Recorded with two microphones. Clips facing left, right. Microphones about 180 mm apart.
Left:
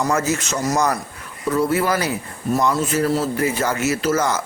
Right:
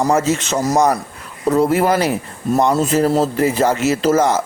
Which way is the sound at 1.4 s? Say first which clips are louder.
Right 5 dB; 50° right (ahead or behind).